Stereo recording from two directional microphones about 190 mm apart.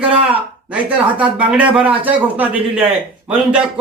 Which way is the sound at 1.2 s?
5° right (ahead or behind).